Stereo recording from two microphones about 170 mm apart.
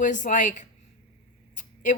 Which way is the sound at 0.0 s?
50° left (ahead or behind).